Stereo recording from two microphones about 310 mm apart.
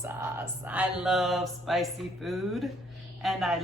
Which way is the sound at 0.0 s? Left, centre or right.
Centre.